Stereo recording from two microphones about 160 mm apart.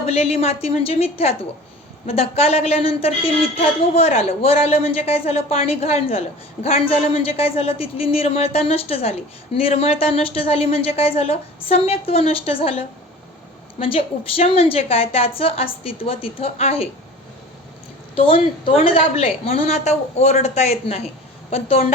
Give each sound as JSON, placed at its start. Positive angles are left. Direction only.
{"t": 0.0, "sound": "a woman's voice", "side_deg": 40}
{"t": 18.1, "sound": "a woman's voice", "side_deg": 35}